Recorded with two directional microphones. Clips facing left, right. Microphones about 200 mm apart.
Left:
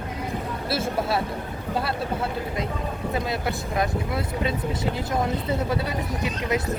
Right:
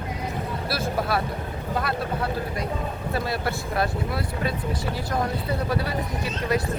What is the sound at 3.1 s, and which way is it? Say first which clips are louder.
Speech: right 1 dB; 15° left (ahead or behind).